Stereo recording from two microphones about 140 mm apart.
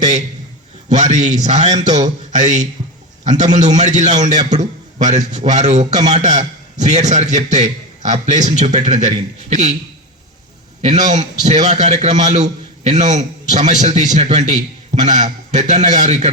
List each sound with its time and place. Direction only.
0.9 s a man's voice: 55° right (ahead or behind)
1.9 s speech: 30° right (ahead or behind)
2.4 s a man's voice: 60° right (ahead or behind)
10.8 s a man's voice: 60° right (ahead or behind)